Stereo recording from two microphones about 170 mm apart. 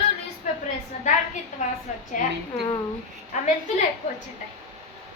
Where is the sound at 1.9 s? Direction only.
45° left (ahead or behind).